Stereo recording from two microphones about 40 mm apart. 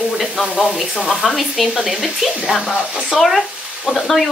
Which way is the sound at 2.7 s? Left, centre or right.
Centre.